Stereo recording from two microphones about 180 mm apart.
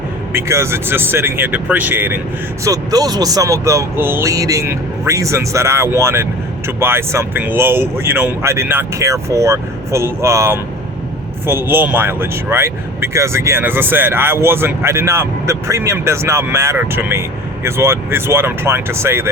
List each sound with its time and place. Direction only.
0.3 s speech: 15° right (ahead or behind)